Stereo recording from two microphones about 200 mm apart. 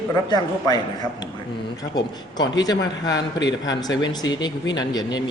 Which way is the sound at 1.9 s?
20° left (ahead or behind).